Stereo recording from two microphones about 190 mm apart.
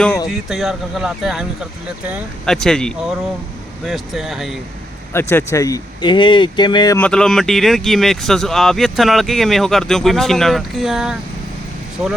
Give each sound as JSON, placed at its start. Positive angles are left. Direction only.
{"t": 0.3, "sound": "speech", "side_deg": 0}
{"t": 2.5, "sound": "speech", "side_deg": 5}
{"t": 5.1, "sound": "speech", "side_deg": 15}
{"t": 7.0, "sound": "speech", "side_deg": 5}